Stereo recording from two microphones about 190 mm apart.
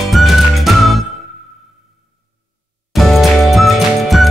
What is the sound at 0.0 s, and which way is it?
Music, centre (ahead or behind).